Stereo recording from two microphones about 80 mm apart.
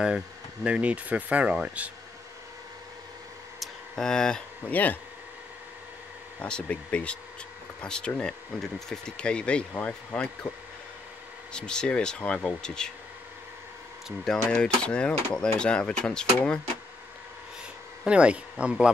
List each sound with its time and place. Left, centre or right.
0.7 s speech: centre
3.5 s a sound: centre
4.6 s speech: left
6.4 s speech: centre
11.5 s speech: centre
14.0 s speech: centre
18.0 s speech: centre